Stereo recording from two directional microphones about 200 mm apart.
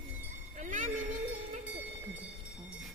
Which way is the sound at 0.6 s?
40° right (ahead or behind).